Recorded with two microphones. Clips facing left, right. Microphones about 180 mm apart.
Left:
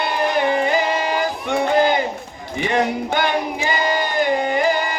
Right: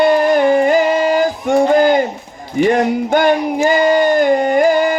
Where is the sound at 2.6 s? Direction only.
45° right (ahead or behind).